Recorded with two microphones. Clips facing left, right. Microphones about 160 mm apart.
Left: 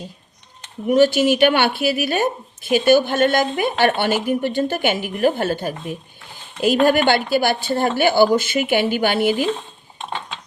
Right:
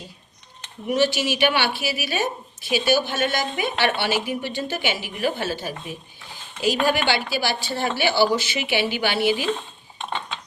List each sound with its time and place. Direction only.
0.9 s a woman's voice: 50° left (ahead or behind)